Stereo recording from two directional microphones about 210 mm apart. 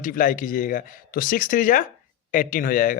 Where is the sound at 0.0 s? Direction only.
40° left (ahead or behind).